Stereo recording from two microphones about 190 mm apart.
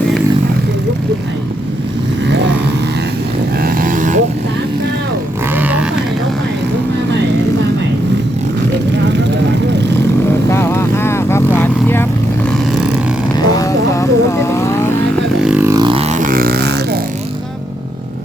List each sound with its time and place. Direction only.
3.6 s vehicle: 50° right (ahead or behind)
5.5 s a sound: 10° right (ahead or behind)
10.5 s vehicle: 15° left (ahead or behind)
13.3 s vehicle: 20° left (ahead or behind)
15.4 s vehicle: 10° right (ahead or behind)
15.8 s vehicle: 30° right (ahead or behind); by 17.0 s 60° right (ahead or behind)